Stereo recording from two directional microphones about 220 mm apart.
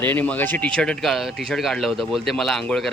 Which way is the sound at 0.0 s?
10° left (ahead or behind).